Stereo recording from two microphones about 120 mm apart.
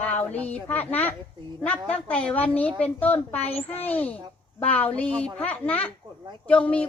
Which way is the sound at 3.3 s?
55° left (ahead or behind).